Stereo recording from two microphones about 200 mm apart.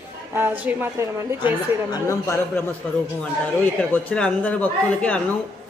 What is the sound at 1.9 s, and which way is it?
Speech, 15° left (ahead or behind).